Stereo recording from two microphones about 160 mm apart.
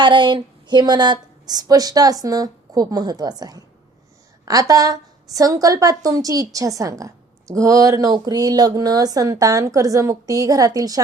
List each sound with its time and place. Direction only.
0.0 s a woman's voice: 30° right (ahead or behind)